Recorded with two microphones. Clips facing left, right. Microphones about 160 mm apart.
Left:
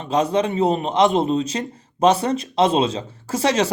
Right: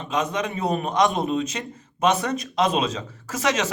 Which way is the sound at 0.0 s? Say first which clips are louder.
Left 6 dB; 35° left (ahead or behind).